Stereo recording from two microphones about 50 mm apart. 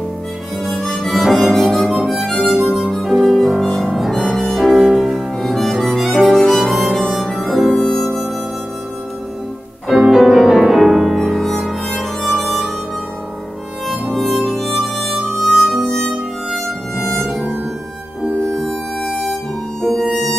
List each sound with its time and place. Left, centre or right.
0.7 s harmonica: centre
3.0 s music: centre
9.8 s music: centre
11.2 s music: centre
11.9 s harmonica: centre
14.0 s harmonica: centre
16.4 s music: centre
18.7 s music: centre